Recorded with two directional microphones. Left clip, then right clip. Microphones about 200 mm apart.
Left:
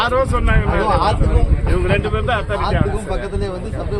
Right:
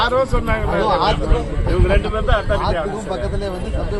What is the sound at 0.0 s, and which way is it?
Speech, 5° left (ahead or behind).